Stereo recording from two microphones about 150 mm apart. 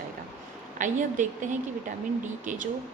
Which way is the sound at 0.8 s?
55° right (ahead or behind).